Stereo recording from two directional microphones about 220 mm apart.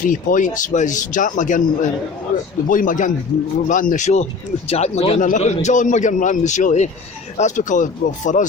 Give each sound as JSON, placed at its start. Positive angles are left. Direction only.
{"t": 0.1, "sound": "a man's voice", "side_deg": 35}